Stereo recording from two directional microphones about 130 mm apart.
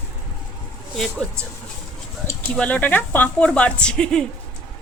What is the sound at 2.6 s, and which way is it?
Speech, 10° left (ahead or behind).